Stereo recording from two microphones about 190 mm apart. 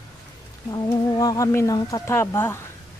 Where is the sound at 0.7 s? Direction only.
20° left (ahead or behind).